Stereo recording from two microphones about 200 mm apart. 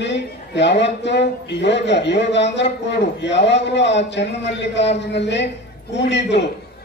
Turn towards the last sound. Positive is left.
turn(degrees=60)  # may be behind; listen again after turning